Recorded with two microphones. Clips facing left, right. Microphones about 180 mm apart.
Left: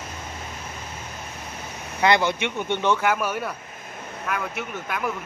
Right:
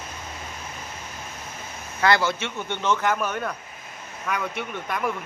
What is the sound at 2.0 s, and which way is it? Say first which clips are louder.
A man's voice: left 1 dB; 20° left (ahead or behind).